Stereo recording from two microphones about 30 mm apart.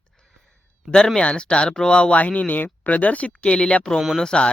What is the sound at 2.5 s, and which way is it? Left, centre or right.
Speech, left.